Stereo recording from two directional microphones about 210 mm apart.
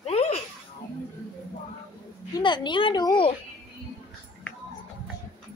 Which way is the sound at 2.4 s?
20° left (ahead or behind).